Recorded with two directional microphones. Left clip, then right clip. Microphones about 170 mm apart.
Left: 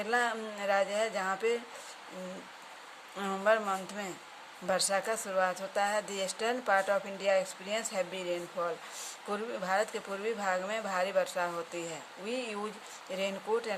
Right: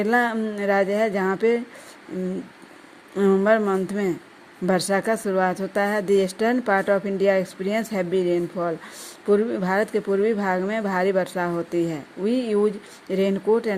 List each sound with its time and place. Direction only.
0.0 s speech: 40° right (ahead or behind)
3.2 s speech: 30° right (ahead or behind)